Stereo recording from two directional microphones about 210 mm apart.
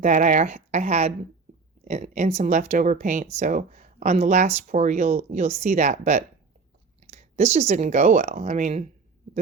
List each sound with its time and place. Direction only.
0.0 s speech: 35° right (ahead or behind)